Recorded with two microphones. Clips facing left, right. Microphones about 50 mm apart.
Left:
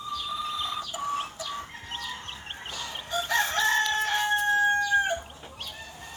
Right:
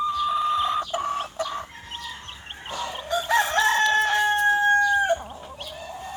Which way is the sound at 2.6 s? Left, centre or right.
Right.